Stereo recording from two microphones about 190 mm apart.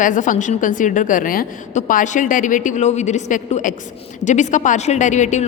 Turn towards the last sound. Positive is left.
turn(degrees=40)  # may be behind; listen again after turning